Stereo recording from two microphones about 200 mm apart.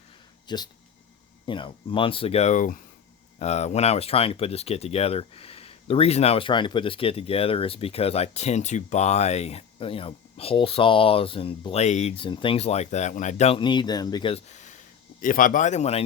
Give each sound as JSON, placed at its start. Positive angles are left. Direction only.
{"t": 0.4, "sound": "speech", "side_deg": 20}